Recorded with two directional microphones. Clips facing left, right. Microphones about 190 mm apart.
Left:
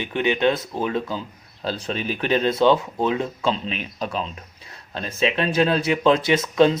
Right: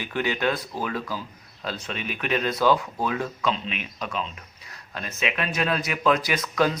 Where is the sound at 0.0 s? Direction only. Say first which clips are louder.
Left 5 dB; 20° left (ahead or behind).